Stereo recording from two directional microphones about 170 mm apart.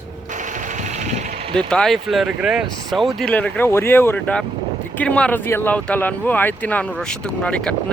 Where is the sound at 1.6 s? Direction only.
5° left (ahead or behind).